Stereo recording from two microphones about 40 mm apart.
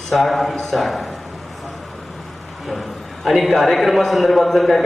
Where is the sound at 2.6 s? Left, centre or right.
Centre.